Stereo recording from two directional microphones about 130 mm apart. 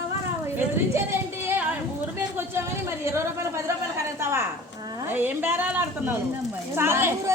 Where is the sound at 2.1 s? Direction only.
20° right (ahead or behind).